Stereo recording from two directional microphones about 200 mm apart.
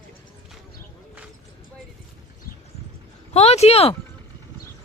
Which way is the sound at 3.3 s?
30° left (ahead or behind).